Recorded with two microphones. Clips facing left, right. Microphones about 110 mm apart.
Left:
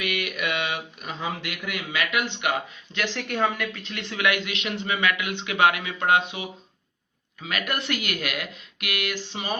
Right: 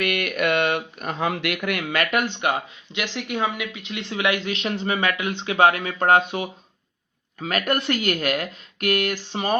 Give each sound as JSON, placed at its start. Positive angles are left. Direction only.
{"t": 0.0, "sound": "speech", "side_deg": -50}
{"t": 2.9, "sound": "speech", "side_deg": -10}